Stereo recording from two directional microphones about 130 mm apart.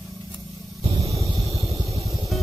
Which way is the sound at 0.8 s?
45° right (ahead or behind).